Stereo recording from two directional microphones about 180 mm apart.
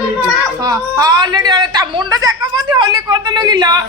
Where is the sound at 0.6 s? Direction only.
20° right (ahead or behind).